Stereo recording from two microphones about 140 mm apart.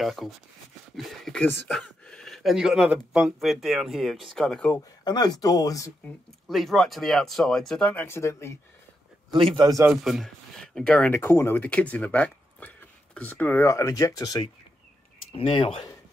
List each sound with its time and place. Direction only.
0.0 s speech: centre (ahead or behind)
5.0 s speech: 30° left (ahead or behind)
6.4 s speech: centre (ahead or behind); by 8.5 s 20° left (ahead or behind)
9.3 s a man's voice: 35° right (ahead or behind)
9.8 s speech: centre (ahead or behind); by 14.5 s 30° left (ahead or behind)
15.3 s speech: 40° left (ahead or behind)